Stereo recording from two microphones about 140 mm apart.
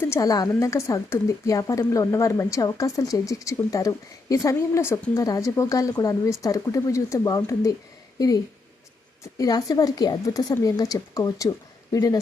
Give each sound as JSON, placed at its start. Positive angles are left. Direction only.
{"t": 0.0, "sound": "a woman's voice", "side_deg": 20}
{"t": 9.4, "sound": "a woman's voice", "side_deg": 25}